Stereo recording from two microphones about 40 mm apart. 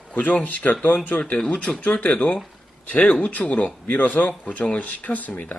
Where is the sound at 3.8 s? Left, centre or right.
Left.